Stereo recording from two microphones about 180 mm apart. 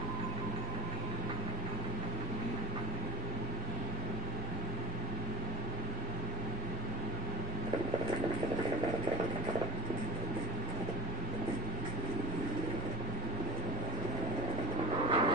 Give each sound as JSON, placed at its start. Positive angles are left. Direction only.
{"t": 15.0, "sound": "vehicle", "side_deg": -25}